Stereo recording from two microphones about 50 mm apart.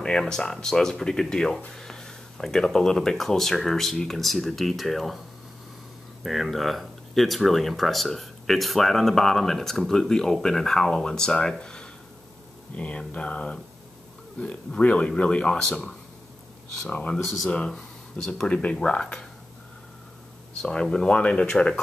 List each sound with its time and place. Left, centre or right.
0.0 s speech: centre
6.2 s speech: centre
17.5 s speech: left
20.6 s speech: centre